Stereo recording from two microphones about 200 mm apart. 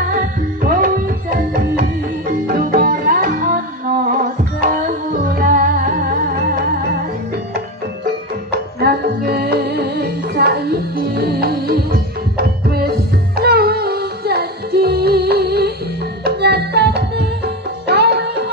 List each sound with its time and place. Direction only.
0.7 s music: 45° right (ahead or behind)
8.5 s music: 55° right (ahead or behind)